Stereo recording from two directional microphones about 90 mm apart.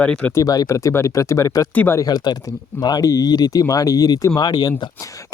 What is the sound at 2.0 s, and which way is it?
Speech, 50° left (ahead or behind).